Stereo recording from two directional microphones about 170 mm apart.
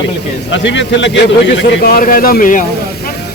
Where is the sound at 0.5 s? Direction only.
90° left; by 2.6 s 50° left (ahead or behind).